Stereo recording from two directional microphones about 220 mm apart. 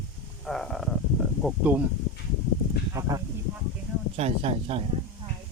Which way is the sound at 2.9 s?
15° right (ahead or behind).